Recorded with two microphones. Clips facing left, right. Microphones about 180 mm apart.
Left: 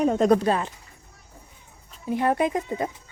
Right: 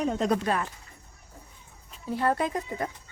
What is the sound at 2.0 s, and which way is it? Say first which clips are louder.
Speech: left 4 dB; 15° left (ahead or behind).